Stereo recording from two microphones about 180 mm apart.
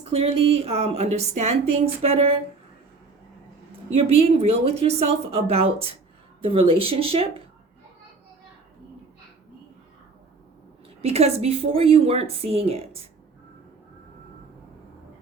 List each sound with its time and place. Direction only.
0.2 s a woman's voice: 35° right (ahead or behind)
3.9 s a woman's voice: 30° right (ahead or behind)
11.0 s a woman's voice: 35° right (ahead or behind)